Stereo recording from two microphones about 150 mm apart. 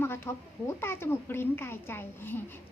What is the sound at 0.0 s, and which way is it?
A woman's voice, 15° left (ahead or behind).